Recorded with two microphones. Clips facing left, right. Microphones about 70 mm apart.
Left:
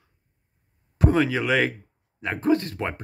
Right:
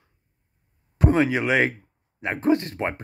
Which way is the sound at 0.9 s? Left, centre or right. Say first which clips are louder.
Right 1 dB; right.